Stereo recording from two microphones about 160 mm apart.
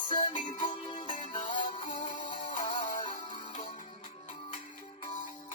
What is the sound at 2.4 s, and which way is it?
Music, 50° left (ahead or behind).